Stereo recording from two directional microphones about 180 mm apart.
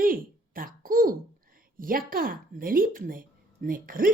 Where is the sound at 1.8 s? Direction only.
50° right (ahead or behind).